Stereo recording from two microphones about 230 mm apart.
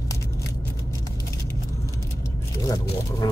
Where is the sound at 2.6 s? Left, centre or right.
Centre.